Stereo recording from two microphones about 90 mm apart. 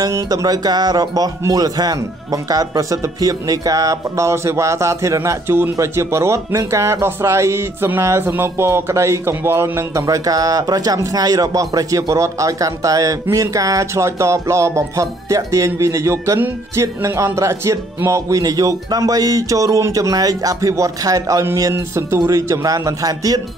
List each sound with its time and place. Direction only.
0.1 s speech: 40° right (ahead or behind)